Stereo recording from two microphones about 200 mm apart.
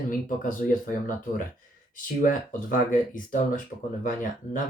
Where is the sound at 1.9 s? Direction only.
40° left (ahead or behind).